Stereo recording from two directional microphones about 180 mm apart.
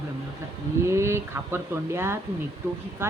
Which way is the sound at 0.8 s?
15° right (ahead or behind).